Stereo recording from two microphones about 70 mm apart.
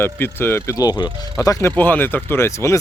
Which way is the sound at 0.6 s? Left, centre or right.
Left.